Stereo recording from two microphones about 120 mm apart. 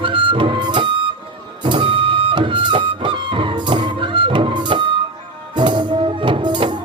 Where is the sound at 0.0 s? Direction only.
45° right (ahead or behind).